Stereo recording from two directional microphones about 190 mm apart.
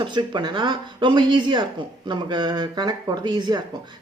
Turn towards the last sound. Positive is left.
turn(degrees=-20)  # may be behind; listen again after turning